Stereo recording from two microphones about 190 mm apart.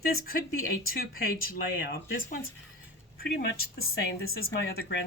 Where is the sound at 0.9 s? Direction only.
50° left (ahead or behind).